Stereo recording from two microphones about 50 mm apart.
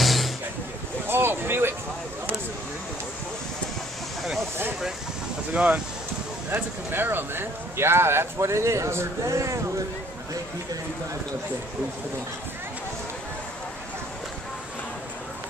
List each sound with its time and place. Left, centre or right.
0.0 s music: centre
1.0 s vehicle: right
5.5 s speech: right
6.5 s speech: right